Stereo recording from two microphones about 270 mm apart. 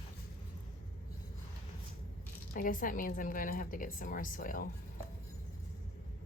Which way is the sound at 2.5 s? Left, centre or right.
Left.